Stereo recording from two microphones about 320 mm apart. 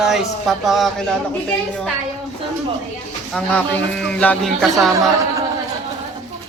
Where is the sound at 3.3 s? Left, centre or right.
Centre.